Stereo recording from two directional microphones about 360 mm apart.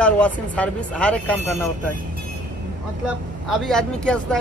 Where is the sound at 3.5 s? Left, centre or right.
Centre.